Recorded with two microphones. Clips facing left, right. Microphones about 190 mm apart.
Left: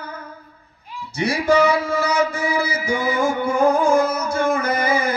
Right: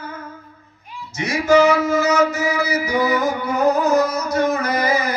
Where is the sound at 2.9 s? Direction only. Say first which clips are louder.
Right 1 dB; 25° left (ahead or behind).